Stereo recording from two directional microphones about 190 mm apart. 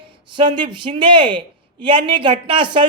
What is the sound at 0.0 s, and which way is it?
Speech, 25° right (ahead or behind).